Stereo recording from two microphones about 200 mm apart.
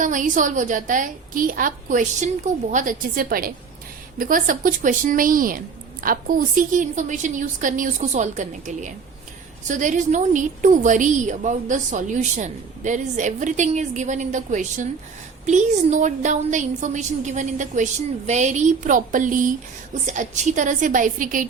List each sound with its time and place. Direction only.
0.0 s a woman's voice: 40° right (ahead or behind)